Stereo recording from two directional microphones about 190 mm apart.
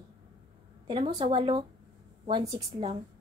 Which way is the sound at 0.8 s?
30° right (ahead or behind).